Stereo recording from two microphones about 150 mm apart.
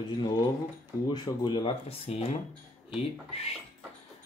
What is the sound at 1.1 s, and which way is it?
Speech, 30° left (ahead or behind).